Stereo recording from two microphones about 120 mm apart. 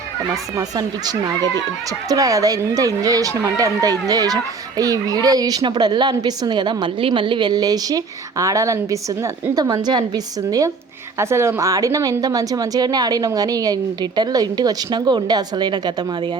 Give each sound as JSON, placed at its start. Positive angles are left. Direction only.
{"t": 0.5, "sound": "a woman's voice", "side_deg": -30}